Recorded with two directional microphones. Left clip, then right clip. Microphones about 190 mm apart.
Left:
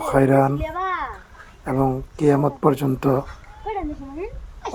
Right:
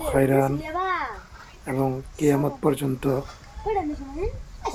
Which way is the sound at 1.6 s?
10° left (ahead or behind).